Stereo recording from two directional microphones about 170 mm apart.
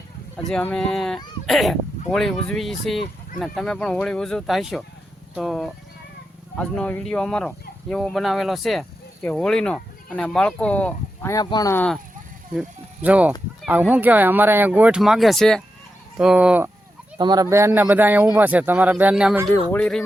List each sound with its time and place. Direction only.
0.3 s speech: 5° left (ahead or behind)
6.6 s fowl: 10° left (ahead or behind)
11.4 s speech: 20° left (ahead or behind)
12.5 s speech: 10° right (ahead or behind)
17.2 s speech: 25° right (ahead or behind); by 19.5 s 5° right (ahead or behind)
19.7 s speech: 5° left (ahead or behind)